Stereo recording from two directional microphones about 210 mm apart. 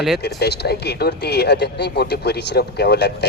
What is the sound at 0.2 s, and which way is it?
Speech, 50° left (ahead or behind).